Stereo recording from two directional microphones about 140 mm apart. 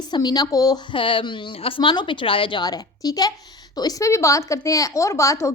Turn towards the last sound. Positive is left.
turn(degrees=20)  # may be behind; listen again after turning